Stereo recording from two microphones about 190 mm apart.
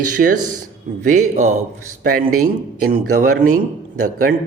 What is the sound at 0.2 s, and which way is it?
Speech, 50° right (ahead or behind).